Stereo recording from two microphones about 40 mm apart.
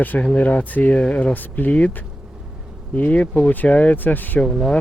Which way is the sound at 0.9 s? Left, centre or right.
Left.